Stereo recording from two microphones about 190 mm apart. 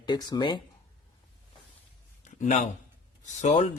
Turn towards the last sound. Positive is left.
turn(degrees=40)  # may be behind; listen again after turning